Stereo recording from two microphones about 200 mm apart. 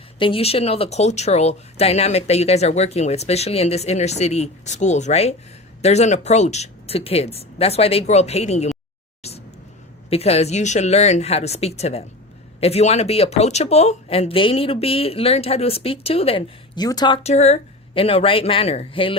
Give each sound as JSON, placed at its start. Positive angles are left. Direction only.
{"t": 0.2, "sound": "speech", "side_deg": 25}
{"t": 9.2, "sound": "a sound", "side_deg": 30}
{"t": 10.1, "sound": "speech", "side_deg": 30}
{"t": 17.2, "sound": "speech", "side_deg": 35}